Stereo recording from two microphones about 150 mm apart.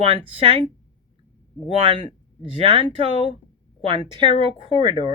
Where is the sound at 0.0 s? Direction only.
40° right (ahead or behind).